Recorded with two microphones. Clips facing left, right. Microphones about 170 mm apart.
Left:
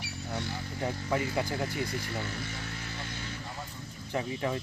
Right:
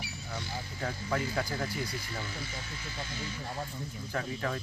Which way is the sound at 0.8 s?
15° left (ahead or behind).